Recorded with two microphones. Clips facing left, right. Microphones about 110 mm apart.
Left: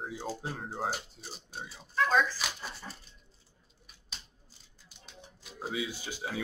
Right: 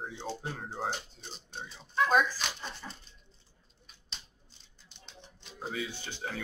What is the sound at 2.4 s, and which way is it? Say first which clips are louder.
Dog: even; 5° left (ahead or behind).